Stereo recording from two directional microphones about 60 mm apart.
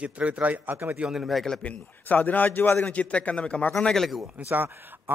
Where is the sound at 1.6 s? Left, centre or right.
Left.